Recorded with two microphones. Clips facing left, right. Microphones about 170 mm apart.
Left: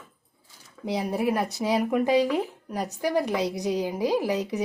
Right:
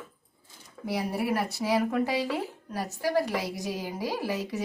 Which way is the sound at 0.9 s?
20° left (ahead or behind).